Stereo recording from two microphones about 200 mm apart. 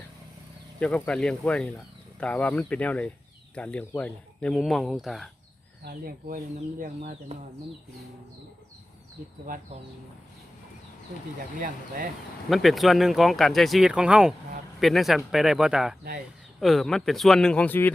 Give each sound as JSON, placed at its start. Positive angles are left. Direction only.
{"t": 0.8, "sound": "speech", "side_deg": 5}
{"t": 5.8, "sound": "speech", "side_deg": -45}
{"t": 12.5, "sound": "speech", "side_deg": 0}